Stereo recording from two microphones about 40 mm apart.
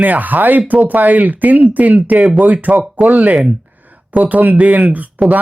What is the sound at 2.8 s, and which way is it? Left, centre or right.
Speech, centre.